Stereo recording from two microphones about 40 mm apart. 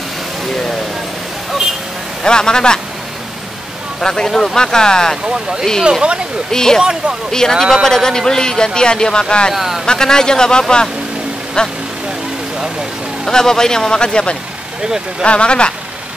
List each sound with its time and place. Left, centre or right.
2.2 s speech: centre
4.0 s a man's voice: centre
4.3 s speech: centre
4.6 s a man's voice: centre
6.5 s a man's voice: centre
6.8 s speech: centre
7.2 s a man's voice: centre
7.5 s speech: centre
7.8 s a man's voice: centre
9.5 s speech: centre
9.8 s speech: centre
13.3 s a man's voice: centre
14.8 s speech: centre
15.2 s speech: left